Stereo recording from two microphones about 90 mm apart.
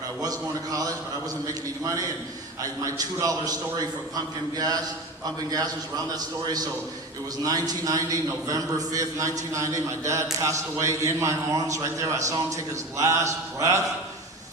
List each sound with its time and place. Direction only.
0.2 s a man's voice: 45° right (ahead or behind)
7.4 s a man's voice: 40° right (ahead or behind)